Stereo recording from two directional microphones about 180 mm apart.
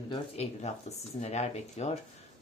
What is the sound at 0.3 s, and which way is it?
Speech, 35° left (ahead or behind).